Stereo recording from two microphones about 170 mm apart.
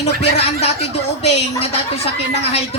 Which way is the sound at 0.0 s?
40° left (ahead or behind).